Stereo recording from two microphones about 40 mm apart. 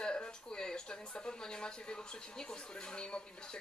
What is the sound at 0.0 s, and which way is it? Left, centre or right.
Speech, left.